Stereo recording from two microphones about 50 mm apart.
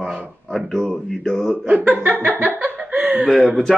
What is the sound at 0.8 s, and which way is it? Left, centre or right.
Speech, centre.